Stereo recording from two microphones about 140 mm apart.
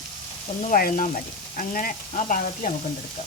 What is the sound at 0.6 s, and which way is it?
Speech, 80° left.